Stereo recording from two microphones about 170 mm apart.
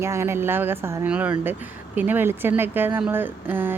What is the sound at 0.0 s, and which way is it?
Speech, 15° right (ahead or behind).